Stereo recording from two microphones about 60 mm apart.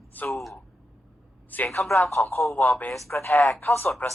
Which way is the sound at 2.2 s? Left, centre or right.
Left.